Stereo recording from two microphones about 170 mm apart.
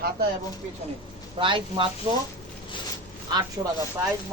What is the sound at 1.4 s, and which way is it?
Speech, 30° right (ahead or behind).